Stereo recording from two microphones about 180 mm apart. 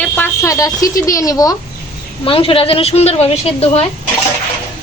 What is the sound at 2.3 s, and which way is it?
Speech, 30° left (ahead or behind).